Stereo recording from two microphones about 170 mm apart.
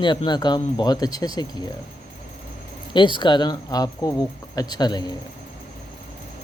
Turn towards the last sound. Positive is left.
turn(degrees=25)  # may be behind; listen again after turning